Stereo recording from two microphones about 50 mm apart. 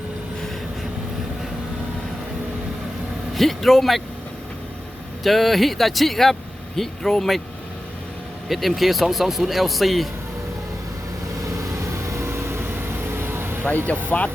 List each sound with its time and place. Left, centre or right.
3.3 s a man's voice: centre
5.2 s a man's voice: centre
8.4 s a man's voice: centre
12.0 s vehicle: right
14.1 s speech: left